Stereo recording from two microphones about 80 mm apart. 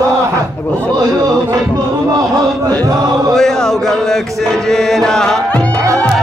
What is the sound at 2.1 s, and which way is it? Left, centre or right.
A man's voice, right.